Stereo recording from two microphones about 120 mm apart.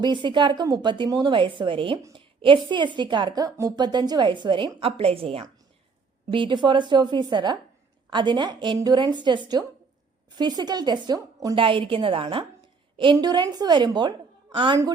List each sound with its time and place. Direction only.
0.0 s a woman's voice: 40° right (ahead or behind)
11.5 s a woman's voice: 45° right (ahead or behind)
13.1 s a woman's voice: 35° right (ahead or behind)